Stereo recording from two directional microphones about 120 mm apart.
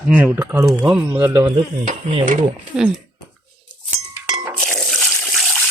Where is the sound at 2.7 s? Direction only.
5° right (ahead or behind).